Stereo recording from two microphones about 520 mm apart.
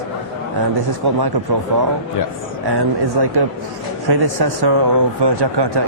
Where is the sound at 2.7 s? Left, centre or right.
Right.